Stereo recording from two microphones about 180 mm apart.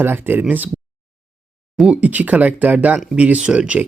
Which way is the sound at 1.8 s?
5° right (ahead or behind).